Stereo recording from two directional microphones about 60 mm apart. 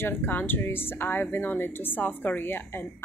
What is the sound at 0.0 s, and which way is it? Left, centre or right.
Speech, left.